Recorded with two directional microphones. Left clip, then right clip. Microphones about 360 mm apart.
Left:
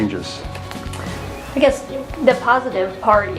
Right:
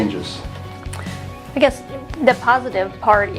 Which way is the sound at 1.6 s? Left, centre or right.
Right.